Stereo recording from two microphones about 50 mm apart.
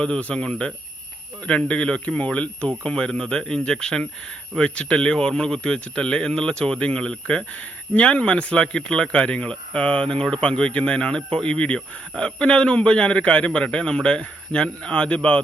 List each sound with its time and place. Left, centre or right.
0.0 s a man's voice: left